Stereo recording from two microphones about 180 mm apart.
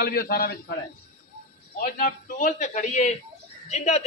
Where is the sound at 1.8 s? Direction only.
50° left (ahead or behind).